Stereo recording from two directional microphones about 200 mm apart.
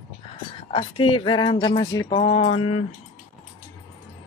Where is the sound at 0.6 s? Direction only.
25° left (ahead or behind).